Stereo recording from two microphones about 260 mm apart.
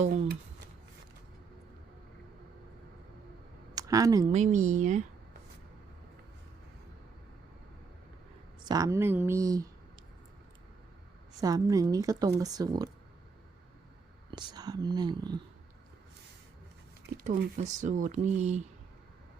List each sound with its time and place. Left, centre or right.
0.0 s speech: right
3.8 s speech: centre
4.3 s speech: right
8.6 s speech: centre
11.3 s speech: centre
14.3 s speech: centre
17.2 s speech: right